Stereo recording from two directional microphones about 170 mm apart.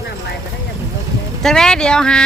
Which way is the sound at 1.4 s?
5° left (ahead or behind).